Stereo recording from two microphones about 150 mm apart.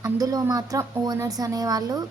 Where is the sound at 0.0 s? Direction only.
25° right (ahead or behind).